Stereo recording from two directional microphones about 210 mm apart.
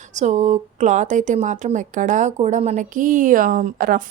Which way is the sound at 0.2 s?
35° right (ahead or behind).